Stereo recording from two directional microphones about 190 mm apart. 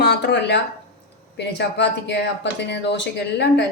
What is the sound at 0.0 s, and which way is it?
Speech, 60° left (ahead or behind).